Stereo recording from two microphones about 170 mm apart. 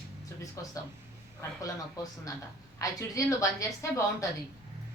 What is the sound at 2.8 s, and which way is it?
Speech, 20° left (ahead or behind).